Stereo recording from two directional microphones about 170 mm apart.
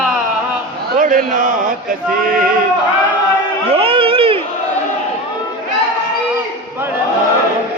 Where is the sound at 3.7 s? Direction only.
30° right (ahead or behind).